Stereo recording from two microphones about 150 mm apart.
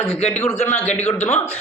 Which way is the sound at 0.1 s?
45° left (ahead or behind).